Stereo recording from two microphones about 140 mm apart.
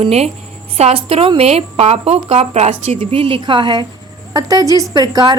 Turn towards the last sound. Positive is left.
turn(degrees=-30)  # may be behind; listen again after turning